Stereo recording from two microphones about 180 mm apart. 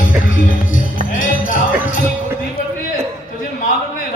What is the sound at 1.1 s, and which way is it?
Music, 45° left (ahead or behind).